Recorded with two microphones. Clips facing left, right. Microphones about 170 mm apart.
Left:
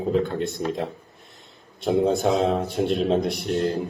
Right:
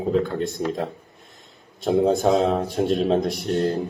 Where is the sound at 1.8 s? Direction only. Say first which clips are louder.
Right 2 dB; 40° right (ahead or behind).